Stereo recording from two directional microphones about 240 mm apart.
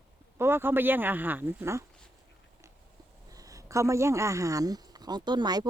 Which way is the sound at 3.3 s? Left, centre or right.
Centre.